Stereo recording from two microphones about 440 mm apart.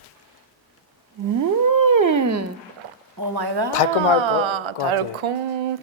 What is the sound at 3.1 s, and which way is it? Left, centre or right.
Speech, right.